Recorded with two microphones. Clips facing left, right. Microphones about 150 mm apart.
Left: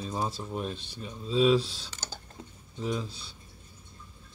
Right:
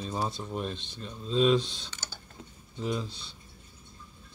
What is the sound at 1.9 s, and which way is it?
Computer keyboard, 45° left (ahead or behind).